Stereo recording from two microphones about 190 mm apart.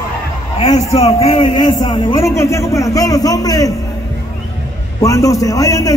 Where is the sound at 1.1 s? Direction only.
25° left (ahead or behind).